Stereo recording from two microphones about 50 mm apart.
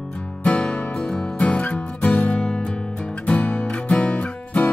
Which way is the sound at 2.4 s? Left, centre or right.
Centre.